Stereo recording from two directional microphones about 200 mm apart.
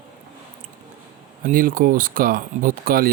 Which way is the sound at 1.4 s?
45° right (ahead or behind).